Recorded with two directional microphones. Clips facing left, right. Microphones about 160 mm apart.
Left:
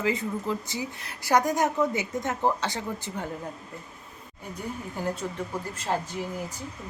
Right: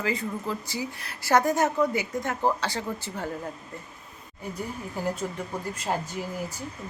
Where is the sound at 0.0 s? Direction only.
20° left (ahead or behind).